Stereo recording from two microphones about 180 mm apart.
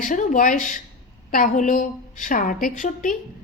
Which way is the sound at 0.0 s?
45° left (ahead or behind).